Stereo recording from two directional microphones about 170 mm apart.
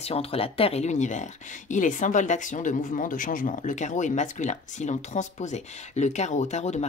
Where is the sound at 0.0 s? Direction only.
35° left (ahead or behind).